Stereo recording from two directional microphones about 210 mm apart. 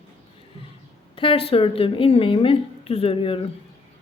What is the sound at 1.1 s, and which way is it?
A woman's voice, 25° left (ahead or behind).